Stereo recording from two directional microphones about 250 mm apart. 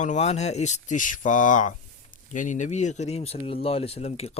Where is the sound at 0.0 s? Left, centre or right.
Left.